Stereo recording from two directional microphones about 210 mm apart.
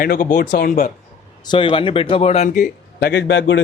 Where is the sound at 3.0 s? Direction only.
55° left (ahead or behind).